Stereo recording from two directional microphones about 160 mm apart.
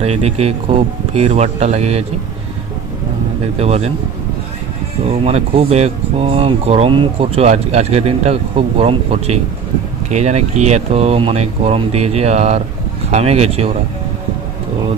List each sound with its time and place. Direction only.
0.0 s speech: 40° right (ahead or behind)
3.5 s speech: 40° right (ahead or behind)
5.0 s speech: 40° right (ahead or behind)